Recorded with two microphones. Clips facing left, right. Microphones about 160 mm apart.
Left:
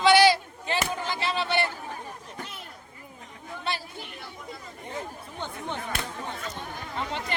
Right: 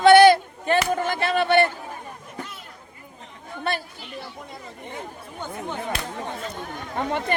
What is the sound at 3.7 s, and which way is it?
Speech, 55° right (ahead or behind).